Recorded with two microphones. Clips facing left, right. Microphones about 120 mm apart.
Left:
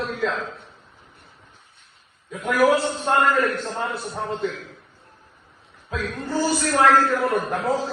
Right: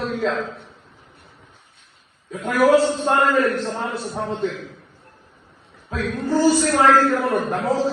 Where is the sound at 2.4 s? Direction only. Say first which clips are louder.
Right 3 dB; centre (ahead or behind).